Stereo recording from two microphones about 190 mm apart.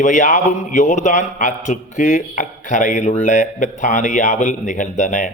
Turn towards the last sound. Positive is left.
turn(degrees=40)  # may be behind; listen again after turning